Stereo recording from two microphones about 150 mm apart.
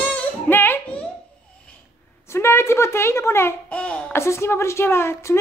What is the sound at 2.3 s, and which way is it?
A child's voice, 15° left (ahead or behind).